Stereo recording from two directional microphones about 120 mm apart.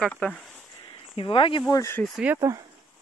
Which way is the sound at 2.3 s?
25° right (ahead or behind).